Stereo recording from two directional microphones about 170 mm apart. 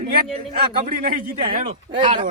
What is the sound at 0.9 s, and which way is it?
Speech, 60° right (ahead or behind).